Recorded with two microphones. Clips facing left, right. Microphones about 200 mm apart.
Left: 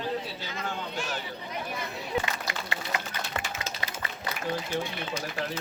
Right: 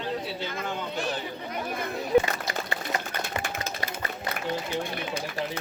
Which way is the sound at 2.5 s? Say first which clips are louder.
Right 3 dB; 40° right (ahead or behind).